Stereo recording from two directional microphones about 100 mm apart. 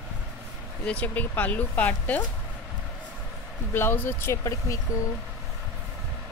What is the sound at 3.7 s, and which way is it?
Speech, 20° left (ahead or behind).